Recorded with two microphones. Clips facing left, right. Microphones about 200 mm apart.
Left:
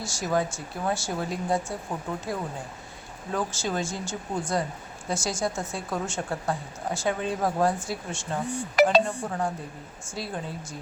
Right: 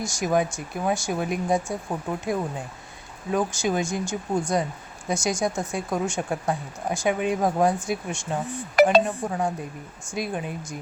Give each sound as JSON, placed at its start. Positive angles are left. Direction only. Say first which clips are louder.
{"t": 0.0, "sound": "speech", "louder": "right 3 dB", "side_deg": -15}
{"t": 3.3, "sound": "speech", "louder": "right 5 dB", "side_deg": -15}
{"t": 8.7, "sound": "a sound", "louder": "right 3 dB", "side_deg": -50}
{"t": 9.0, "sound": "speech", "louder": "right 3 dB", "side_deg": -15}